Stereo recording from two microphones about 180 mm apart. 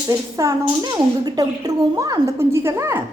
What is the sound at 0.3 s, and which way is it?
Speech, 20° right (ahead or behind).